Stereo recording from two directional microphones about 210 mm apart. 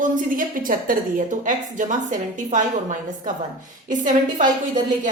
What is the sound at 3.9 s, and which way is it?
Speech, 35° right (ahead or behind).